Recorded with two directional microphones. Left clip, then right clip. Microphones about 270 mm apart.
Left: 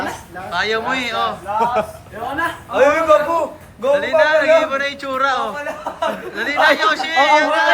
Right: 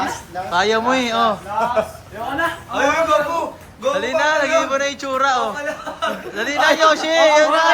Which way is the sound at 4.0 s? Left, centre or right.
Centre.